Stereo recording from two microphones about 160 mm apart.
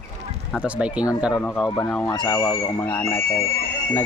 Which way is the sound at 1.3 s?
5° left (ahead or behind).